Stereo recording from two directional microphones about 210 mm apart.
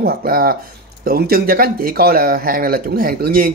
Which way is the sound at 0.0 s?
45° right (ahead or behind).